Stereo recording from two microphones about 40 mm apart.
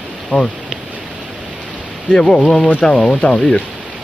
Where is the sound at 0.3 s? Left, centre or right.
Left.